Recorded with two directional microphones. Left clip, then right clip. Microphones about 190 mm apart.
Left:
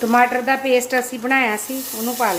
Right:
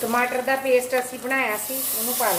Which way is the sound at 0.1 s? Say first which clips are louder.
Left 7 dB; 55° left (ahead or behind).